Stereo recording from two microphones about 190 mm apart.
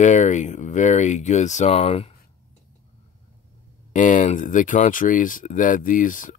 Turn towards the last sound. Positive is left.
turn(degrees=45)  # may be behind; listen again after turning